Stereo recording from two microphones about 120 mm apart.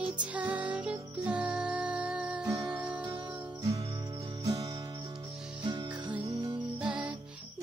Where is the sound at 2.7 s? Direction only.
10° right (ahead or behind).